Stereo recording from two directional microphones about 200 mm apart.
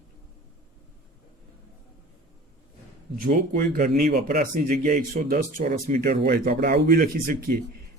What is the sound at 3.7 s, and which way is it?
Speech, 50° right (ahead or behind).